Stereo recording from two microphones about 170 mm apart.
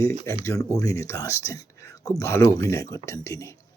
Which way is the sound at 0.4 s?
20° left (ahead or behind).